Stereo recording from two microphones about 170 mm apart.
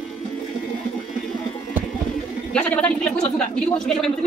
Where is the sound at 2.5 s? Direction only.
5° left (ahead or behind).